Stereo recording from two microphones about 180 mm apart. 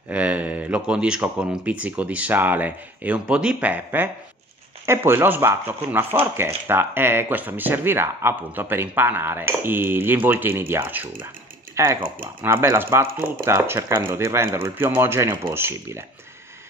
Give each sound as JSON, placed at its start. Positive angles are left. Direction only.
{"t": 0.1, "sound": "speech", "side_deg": -5}